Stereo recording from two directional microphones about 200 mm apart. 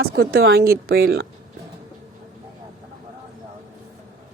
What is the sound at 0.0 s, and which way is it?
Speech, 50° right (ahead or behind).